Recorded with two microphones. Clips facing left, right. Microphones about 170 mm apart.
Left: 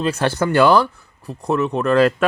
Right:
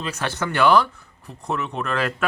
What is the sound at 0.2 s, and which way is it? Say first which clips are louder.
Speech: left 5 dB; 35° left (ahead or behind).